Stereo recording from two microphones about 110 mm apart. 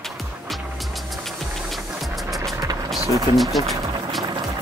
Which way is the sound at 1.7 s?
Centre (ahead or behind).